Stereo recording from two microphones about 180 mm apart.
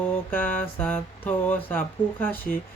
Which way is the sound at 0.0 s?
10° left (ahead or behind).